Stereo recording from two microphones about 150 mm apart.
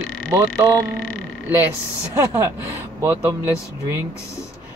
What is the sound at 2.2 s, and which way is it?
Mantra, 20° right (ahead or behind).